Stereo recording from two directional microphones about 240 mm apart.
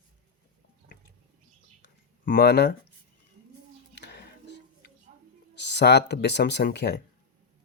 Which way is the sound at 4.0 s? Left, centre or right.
Left.